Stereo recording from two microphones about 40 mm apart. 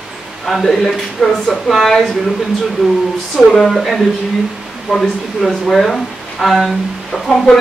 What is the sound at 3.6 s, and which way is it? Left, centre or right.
A man's voice, centre.